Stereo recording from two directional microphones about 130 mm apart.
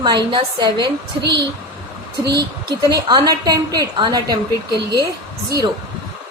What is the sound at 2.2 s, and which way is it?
A woman's voice, 30° right (ahead or behind).